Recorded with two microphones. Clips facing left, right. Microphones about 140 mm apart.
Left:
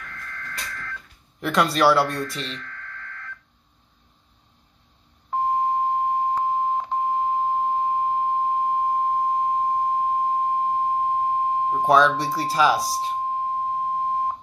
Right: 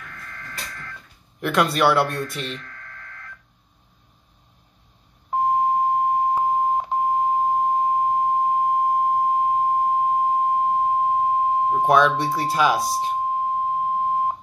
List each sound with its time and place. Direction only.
0.1 s printer: 15° right (ahead or behind)
1.4 s speech: centre (ahead or behind)
2.6 s a sound: 15° right (ahead or behind)
5.3 s beep: 15° right (ahead or behind)
13.3 s beep: 10° right (ahead or behind)